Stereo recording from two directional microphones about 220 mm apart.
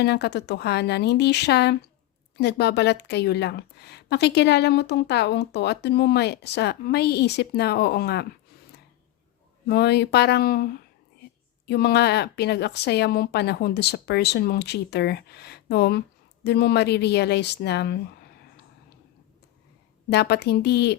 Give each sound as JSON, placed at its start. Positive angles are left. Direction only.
{"t": 0.0, "sound": "a woman's voice", "side_deg": 50}
{"t": 9.6, "sound": "a woman's voice", "side_deg": 45}
{"t": 20.1, "sound": "a woman's voice", "side_deg": 50}